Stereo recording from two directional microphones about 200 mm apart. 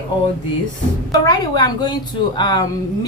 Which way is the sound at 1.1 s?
20° left (ahead or behind).